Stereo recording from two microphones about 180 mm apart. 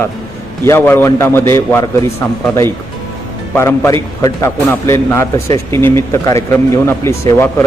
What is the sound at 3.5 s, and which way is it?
A man's voice, 15° left (ahead or behind).